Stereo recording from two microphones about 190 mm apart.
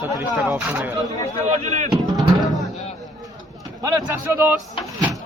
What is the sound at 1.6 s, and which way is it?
Speech, 40° right (ahead or behind).